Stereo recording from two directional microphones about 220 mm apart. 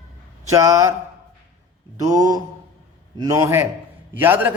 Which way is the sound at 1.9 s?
15° right (ahead or behind).